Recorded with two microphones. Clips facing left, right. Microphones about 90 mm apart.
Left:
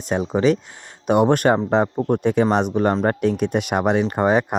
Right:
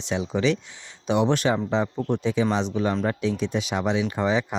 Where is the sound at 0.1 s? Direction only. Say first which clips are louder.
Left 5 dB; 45° left (ahead or behind).